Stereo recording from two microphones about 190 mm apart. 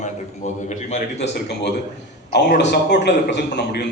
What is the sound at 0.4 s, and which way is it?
Speech, 40° left (ahead or behind).